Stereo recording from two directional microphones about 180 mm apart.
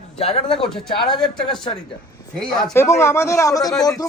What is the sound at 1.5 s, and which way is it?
Speech, 25° left (ahead or behind).